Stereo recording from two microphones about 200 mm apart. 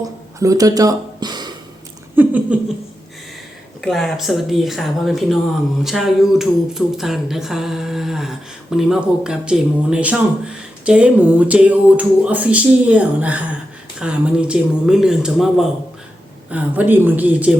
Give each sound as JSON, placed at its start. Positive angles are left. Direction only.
{"t": 0.0, "sound": "a sound", "side_deg": -15}
{"t": 2.1, "sound": "patter", "side_deg": -5}
{"t": 3.8, "sound": "speech", "side_deg": 0}